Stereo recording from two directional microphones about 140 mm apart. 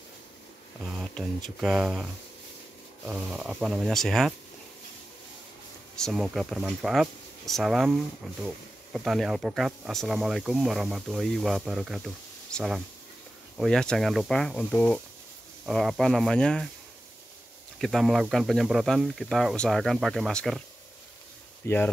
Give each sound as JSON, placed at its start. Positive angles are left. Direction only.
{"t": 0.8, "sound": "a sound", "side_deg": -5}
{"t": 1.1, "sound": "speech", "side_deg": 0}
{"t": 3.1, "sound": "speech", "side_deg": -5}
{"t": 5.9, "sound": "speech", "side_deg": 0}
{"t": 17.7, "sound": "speech", "side_deg": 0}
{"t": 21.6, "sound": "speech", "side_deg": 20}